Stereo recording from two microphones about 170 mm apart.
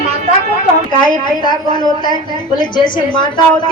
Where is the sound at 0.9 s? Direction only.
25° left (ahead or behind).